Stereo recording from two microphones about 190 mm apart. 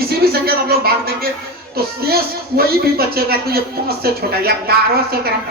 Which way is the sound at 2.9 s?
55° right (ahead or behind).